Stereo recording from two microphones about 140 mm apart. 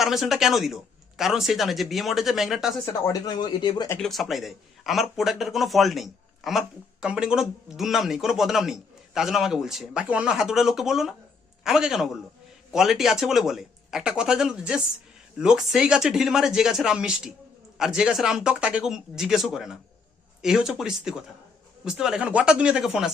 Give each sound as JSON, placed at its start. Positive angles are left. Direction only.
{"t": 0.0, "sound": "a man's voice", "side_deg": 0}
{"t": 2.8, "sound": "speech", "side_deg": 30}
{"t": 4.0, "sound": "a man's voice", "side_deg": 0}